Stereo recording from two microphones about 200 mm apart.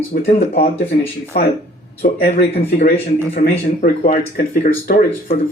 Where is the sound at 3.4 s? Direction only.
50° left (ahead or behind).